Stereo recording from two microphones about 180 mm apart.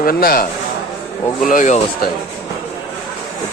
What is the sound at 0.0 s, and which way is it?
Speech, 55° left (ahead or behind).